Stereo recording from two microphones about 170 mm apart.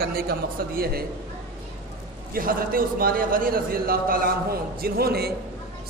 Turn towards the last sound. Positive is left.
turn(degrees=-65)  # may be behind; listen again after turning